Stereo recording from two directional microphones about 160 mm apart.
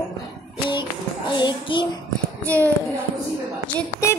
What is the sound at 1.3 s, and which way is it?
Speech, 30° left (ahead or behind).